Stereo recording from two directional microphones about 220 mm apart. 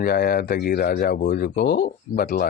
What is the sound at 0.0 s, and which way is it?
Speech, 45° left (ahead or behind).